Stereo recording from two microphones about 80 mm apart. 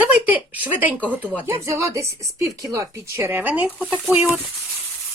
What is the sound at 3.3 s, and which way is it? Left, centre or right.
Speech, right.